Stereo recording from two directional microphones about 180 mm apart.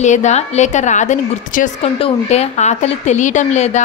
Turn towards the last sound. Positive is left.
turn(degrees=40)  # may be behind; listen again after turning